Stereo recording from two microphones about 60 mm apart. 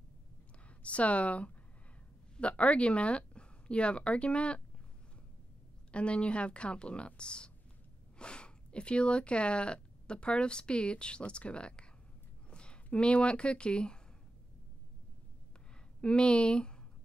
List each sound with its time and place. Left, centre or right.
0.8 s speech: left
5.9 s speech: centre
16.0 s speech: centre